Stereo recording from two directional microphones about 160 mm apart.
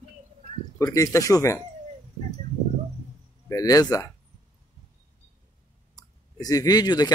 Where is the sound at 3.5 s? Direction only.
20° left (ahead or behind).